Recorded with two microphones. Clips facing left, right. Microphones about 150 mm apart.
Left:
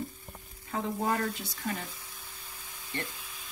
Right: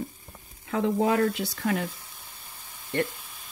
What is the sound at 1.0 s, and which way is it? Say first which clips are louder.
Speech: right 7 dB; 75° right (ahead or behind).